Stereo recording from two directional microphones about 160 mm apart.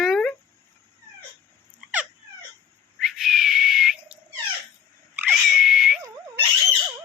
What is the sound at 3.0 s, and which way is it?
Whistle, centre (ahead or behind).